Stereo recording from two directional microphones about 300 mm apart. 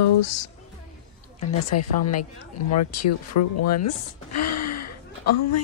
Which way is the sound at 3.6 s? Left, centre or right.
Left.